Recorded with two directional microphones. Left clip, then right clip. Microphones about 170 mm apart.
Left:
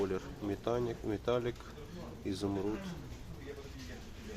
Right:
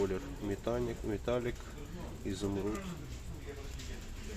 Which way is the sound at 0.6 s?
10° left (ahead or behind).